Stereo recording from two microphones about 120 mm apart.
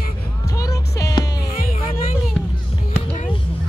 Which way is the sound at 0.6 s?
30° left (ahead or behind).